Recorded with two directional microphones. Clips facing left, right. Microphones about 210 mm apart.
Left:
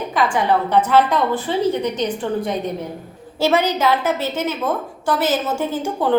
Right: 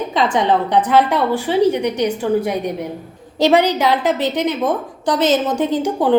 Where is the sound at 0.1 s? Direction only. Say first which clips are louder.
Right 1 dB; 20° right (ahead or behind).